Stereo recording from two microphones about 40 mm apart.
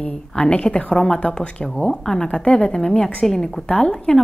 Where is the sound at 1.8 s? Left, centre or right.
Centre.